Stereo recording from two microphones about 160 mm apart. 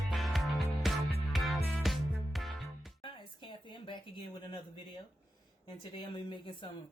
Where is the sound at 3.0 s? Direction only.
30° left (ahead or behind).